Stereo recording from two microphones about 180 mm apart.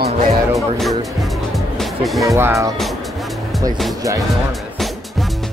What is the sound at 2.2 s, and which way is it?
Speech, 15° right (ahead or behind).